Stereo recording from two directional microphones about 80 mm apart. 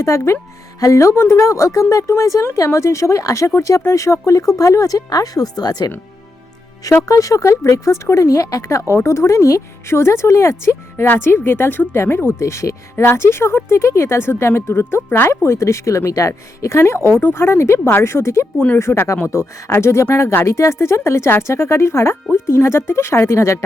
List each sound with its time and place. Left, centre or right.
0.0 s speech: left
7.0 s speech: left